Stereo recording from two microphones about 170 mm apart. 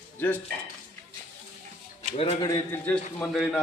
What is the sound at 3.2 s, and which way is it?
Speech, 5° left (ahead or behind).